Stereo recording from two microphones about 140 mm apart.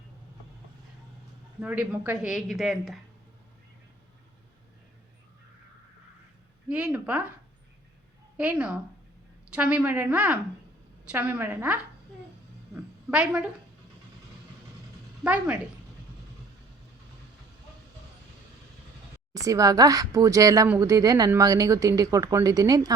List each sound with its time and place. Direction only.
1.6 s a woman's voice: 10° right (ahead or behind)
6.7 s a woman's voice: 10° right (ahead or behind)
8.4 s a woman's voice: 10° right (ahead or behind)
13.1 s a woman's voice: 5° right (ahead or behind)
15.2 s a woman's voice: 10° right (ahead or behind)
19.3 s speech: 25° right (ahead or behind)